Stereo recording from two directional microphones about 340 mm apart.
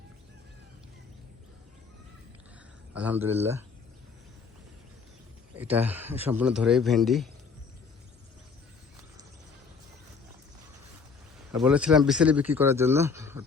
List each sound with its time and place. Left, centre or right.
2.9 s speech: centre
5.5 s speech: centre
11.5 s speech: centre